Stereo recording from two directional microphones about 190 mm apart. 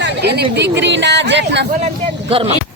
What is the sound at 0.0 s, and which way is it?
Speech, 60° right (ahead or behind).